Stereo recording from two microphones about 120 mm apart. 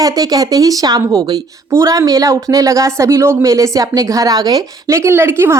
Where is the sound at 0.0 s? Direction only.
30° right (ahead or behind).